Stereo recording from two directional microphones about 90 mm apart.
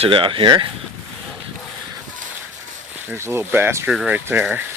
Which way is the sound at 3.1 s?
30° right (ahead or behind).